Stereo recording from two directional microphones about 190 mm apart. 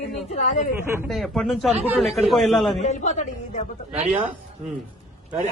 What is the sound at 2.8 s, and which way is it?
Speech, 40° left (ahead or behind).